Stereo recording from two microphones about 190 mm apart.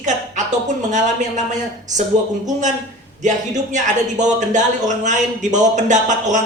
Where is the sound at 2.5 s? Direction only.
40° right (ahead or behind).